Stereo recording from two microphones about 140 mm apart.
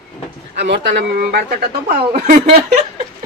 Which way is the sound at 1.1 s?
90° right.